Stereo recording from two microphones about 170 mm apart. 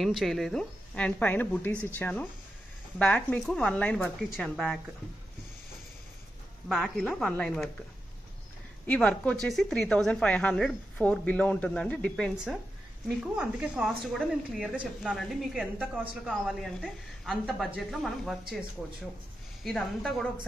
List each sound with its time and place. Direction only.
0.0 s a woman's voice: centre (ahead or behind)
6.7 s speech: 5° left (ahead or behind)
8.8 s speech: 5° left (ahead or behind)